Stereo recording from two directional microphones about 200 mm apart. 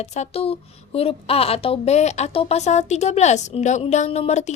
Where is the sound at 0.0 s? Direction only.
35° left (ahead or behind).